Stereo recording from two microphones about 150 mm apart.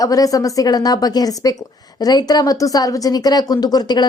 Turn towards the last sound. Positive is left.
turn(degrees=25)  # may be behind; listen again after turning